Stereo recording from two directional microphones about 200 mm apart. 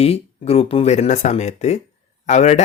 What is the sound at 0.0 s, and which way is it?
A man's voice, 30° left (ahead or behind).